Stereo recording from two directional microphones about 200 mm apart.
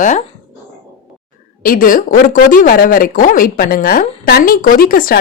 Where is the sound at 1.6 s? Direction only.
45° left (ahead or behind).